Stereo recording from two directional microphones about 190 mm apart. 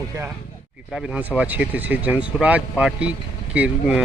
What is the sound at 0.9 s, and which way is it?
Speech, 5° right (ahead or behind).